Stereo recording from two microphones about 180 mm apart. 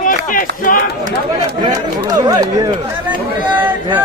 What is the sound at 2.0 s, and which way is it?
Speech, 20° right (ahead or behind).